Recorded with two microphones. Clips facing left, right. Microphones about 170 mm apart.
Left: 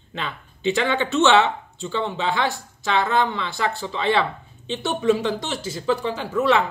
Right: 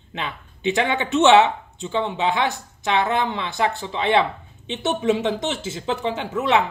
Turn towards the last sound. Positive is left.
turn(degrees=-20)  # may be behind; listen again after turning